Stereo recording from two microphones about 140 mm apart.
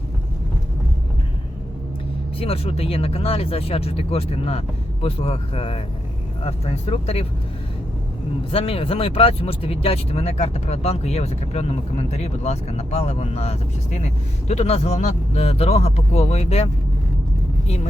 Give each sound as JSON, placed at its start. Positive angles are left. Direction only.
{"t": 2.4, "sound": "speech", "side_deg": 45}
{"t": 8.4, "sound": "speech", "side_deg": 40}